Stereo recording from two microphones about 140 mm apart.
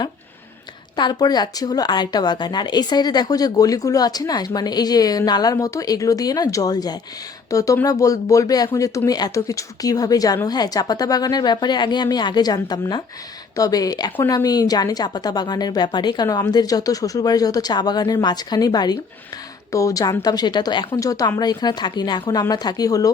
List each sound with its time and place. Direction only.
0.9 s speech: 30° left (ahead or behind)